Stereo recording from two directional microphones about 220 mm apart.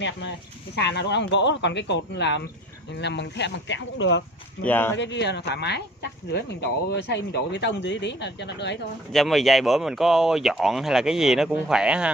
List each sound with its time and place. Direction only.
0.7 s speech: 50° left (ahead or behind)
4.6 s speech: 10° left (ahead or behind)
4.9 s speech: 55° left (ahead or behind)
6.9 s speech: 50° left (ahead or behind)
9.1 s speech: centre (ahead or behind)